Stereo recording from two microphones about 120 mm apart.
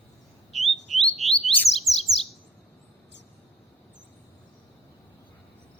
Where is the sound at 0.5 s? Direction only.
Centre (ahead or behind).